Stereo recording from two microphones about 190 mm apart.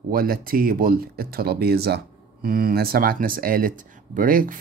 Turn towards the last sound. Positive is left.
turn(degrees=-45)  # may be behind; listen again after turning